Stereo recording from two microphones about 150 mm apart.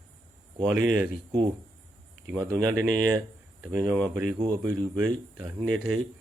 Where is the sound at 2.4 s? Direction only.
20° right (ahead or behind).